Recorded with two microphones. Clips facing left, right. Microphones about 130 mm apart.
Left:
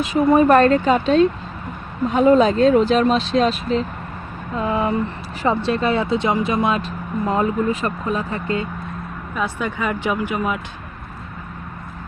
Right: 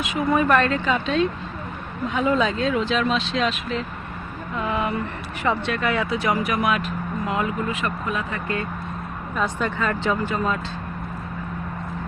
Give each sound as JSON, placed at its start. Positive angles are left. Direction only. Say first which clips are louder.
{"t": 0.0, "sound": "speech", "louder": "left 6 dB", "side_deg": 35}
{"t": 9.3, "sound": "speech", "louder": "left 1 dB", "side_deg": 10}